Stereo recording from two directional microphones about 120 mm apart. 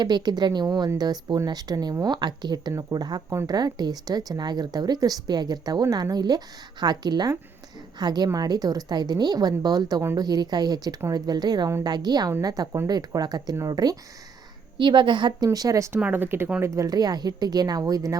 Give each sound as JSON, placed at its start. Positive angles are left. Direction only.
{"t": 0.0, "sound": "speech", "side_deg": -35}
{"t": 14.8, "sound": "a woman's voice", "side_deg": -40}
{"t": 15.4, "sound": "speech", "side_deg": -30}
{"t": 16.0, "sound": "speech", "side_deg": -10}